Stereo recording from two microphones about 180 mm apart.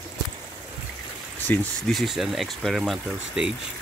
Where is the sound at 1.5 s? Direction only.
Centre (ahead or behind).